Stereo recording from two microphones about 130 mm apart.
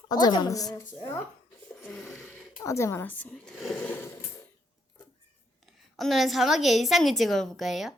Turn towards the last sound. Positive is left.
turn(degrees=0)  # may be behind; listen again after turning